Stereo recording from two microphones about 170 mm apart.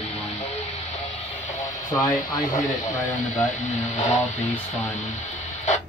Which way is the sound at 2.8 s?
45° left (ahead or behind).